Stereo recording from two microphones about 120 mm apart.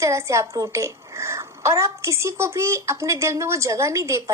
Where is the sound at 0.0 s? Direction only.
25° right (ahead or behind).